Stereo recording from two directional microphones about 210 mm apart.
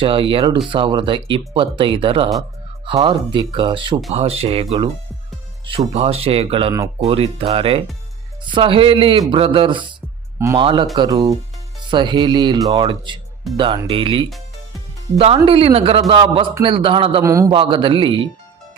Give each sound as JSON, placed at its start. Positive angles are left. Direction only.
{"t": 0.0, "sound": "a man's voice", "side_deg": -25}
{"t": 15.4, "sound": "a man's voice", "side_deg": -25}